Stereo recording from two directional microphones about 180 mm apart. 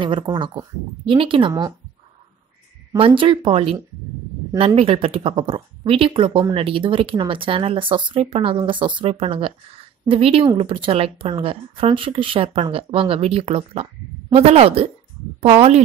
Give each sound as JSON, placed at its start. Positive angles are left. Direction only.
{"t": 0.0, "sound": "speech", "side_deg": -25}
{"t": 3.2, "sound": "speech", "side_deg": -30}